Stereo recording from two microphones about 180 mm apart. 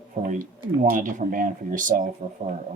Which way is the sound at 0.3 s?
45° right (ahead or behind).